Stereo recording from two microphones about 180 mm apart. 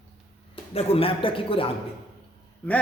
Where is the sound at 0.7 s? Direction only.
30° left (ahead or behind).